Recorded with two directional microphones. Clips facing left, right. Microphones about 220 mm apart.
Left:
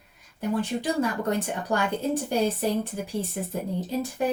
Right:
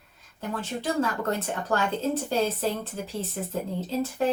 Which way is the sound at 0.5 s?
15° left (ahead or behind).